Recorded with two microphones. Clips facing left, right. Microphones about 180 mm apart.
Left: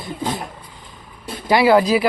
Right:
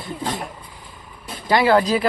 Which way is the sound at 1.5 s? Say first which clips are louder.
Left 2 dB; 10° left (ahead or behind).